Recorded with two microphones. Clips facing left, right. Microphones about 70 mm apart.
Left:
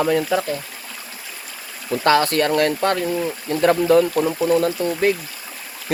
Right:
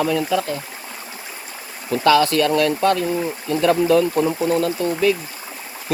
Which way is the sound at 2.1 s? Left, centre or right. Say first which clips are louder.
Right 1 dB; left.